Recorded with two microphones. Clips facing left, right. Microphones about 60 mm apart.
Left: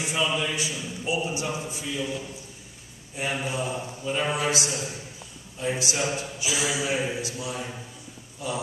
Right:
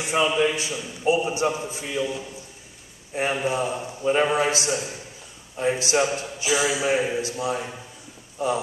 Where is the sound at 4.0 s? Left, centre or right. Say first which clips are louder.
Right 7 dB; right.